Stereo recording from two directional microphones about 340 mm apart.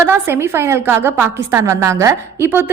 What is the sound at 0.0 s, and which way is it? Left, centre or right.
A woman's voice, centre.